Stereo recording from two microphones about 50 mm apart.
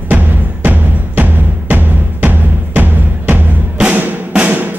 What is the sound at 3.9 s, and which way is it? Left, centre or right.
Drum, right.